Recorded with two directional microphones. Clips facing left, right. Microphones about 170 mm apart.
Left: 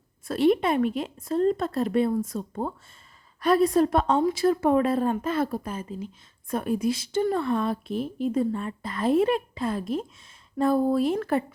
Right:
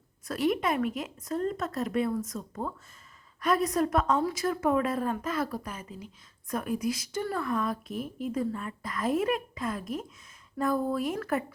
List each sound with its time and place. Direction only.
0.3 s a woman's voice: 30° left (ahead or behind)